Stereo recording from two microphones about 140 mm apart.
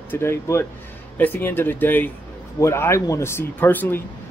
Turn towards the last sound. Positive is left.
turn(degrees=15)  # may be behind; listen again after turning